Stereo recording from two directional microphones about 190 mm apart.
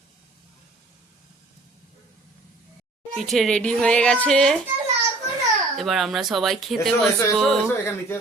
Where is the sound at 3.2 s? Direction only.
Centre (ahead or behind).